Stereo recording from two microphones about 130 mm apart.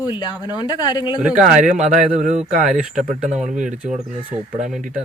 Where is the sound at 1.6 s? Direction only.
75° right (ahead or behind).